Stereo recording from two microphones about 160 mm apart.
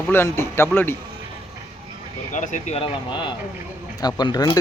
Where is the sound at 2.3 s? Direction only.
50° left (ahead or behind).